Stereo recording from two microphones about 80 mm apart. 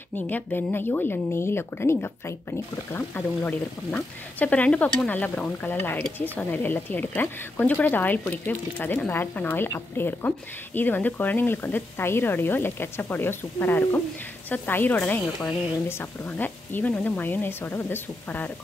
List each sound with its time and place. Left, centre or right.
0.3 s speech: left